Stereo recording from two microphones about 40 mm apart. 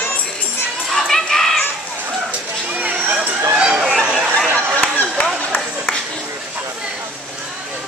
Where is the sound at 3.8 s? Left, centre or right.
Centre.